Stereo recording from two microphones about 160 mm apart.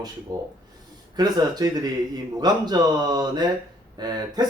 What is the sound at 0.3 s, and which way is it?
Speech, 25° right (ahead or behind).